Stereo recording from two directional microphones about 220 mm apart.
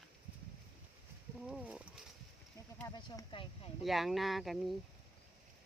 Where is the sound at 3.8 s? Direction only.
Centre (ahead or behind).